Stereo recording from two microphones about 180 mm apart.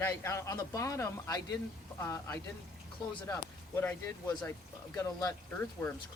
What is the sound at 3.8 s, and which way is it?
Speech, 10° left (ahead or behind).